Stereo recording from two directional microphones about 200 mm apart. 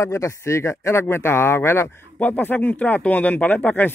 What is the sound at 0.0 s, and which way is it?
Speech, 15° left (ahead or behind).